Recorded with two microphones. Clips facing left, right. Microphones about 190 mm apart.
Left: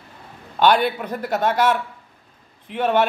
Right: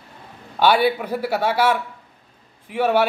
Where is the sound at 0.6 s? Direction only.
5° right (ahead or behind).